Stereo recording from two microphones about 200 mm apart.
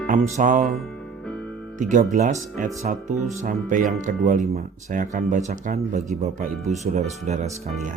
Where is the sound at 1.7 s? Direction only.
40° right (ahead or behind).